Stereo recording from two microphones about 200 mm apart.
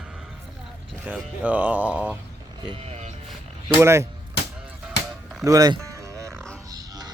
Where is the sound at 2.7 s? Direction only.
30° right (ahead or behind).